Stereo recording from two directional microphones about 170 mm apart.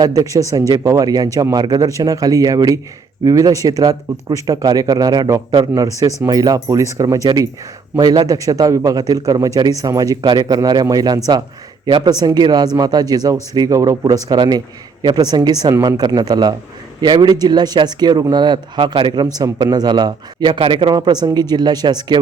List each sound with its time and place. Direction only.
0.0 s speech: 20° right (ahead or behind)